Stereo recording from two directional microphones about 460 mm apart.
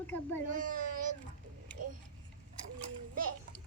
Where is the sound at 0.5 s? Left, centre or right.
Centre.